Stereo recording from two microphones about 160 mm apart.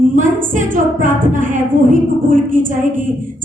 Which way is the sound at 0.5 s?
55° right (ahead or behind).